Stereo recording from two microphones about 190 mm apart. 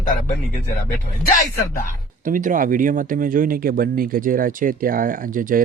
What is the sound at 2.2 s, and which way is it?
Speech, 45° right (ahead or behind).